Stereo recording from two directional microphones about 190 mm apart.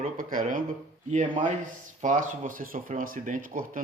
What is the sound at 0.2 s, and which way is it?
Speech, 45° right (ahead or behind).